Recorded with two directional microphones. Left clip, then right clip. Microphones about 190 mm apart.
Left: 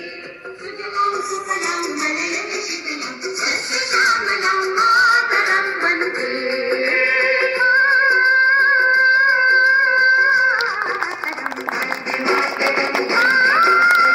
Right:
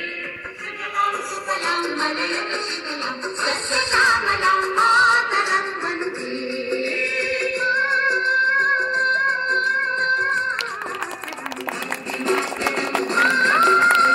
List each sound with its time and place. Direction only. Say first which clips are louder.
1.1 s music: left 3 dB; 15° left (ahead or behind)
3.9 s music: left 1 dB; 15° left (ahead or behind)
12.1 s music: left 4 dB; 15° left (ahead or behind)